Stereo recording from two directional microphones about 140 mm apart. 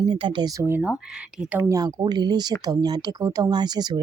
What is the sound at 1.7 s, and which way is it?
Speech, 25° right (ahead or behind).